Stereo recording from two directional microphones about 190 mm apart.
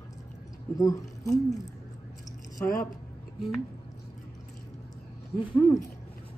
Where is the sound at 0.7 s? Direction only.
15° left (ahead or behind).